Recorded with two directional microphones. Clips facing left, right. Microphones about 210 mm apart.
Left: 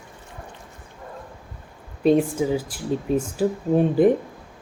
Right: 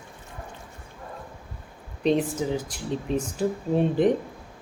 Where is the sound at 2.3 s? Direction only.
10° left (ahead or behind).